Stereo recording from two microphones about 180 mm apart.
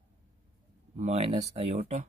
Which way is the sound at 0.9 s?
40° right (ahead or behind).